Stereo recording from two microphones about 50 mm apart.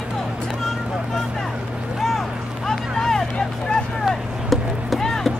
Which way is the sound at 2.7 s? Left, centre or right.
Centre.